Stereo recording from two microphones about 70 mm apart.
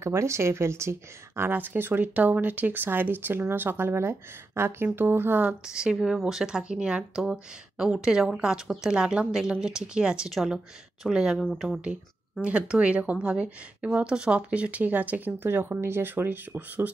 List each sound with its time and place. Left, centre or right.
0.0 s speech: right
1.5 s speech: right
5.8 s speech: centre